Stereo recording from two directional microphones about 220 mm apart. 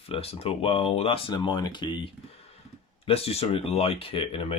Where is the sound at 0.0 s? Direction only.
25° left (ahead or behind).